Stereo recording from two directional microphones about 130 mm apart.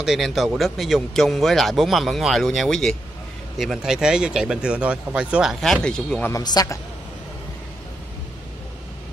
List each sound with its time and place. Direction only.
0.0 s speech: centre (ahead or behind)
6.3 s a man's voice: 30° left (ahead or behind)